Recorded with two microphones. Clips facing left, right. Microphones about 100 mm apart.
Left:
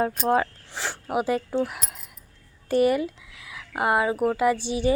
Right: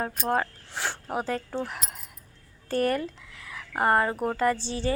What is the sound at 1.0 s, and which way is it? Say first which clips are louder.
Speech: left 8 dB; 10° left (ahead or behind).